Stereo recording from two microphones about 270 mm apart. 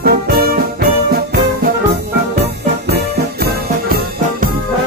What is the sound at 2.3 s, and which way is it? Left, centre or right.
Music, right.